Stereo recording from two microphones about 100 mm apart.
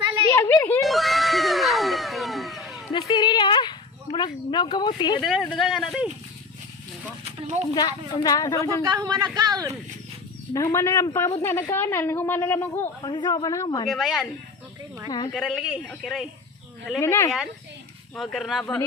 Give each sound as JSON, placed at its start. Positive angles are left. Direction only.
{"t": 0.3, "sound": "a sound", "side_deg": 25}
{"t": 0.8, "sound": "crowd", "side_deg": 0}
{"t": 2.9, "sound": "a sound", "side_deg": 50}
{"t": 5.2, "sound": "a man's voice", "side_deg": 0}
{"t": 7.8, "sound": "speech", "side_deg": 40}
{"t": 8.9, "sound": "a man's voice", "side_deg": -40}
{"t": 10.5, "sound": "a woman's voice", "side_deg": 30}
{"t": 13.0, "sound": "speech", "side_deg": 45}
{"t": 13.8, "sound": "a man's voice", "side_deg": 0}
{"t": 15.3, "sound": "a man's voice", "side_deg": 5}
{"t": 17.0, "sound": "a woman's voice", "side_deg": 25}
{"t": 18.1, "sound": "a man's voice", "side_deg": 0}